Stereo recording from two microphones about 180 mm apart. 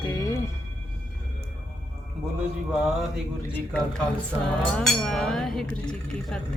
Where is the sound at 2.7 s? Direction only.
5° right (ahead or behind).